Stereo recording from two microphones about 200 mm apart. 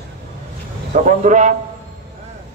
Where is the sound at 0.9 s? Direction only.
35° right (ahead or behind).